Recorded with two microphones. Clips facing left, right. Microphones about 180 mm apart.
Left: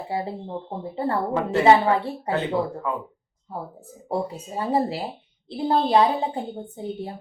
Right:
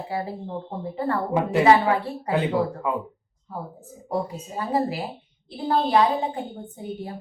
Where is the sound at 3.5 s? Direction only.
30° left (ahead or behind).